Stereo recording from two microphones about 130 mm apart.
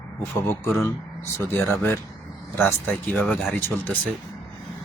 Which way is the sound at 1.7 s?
20° left (ahead or behind).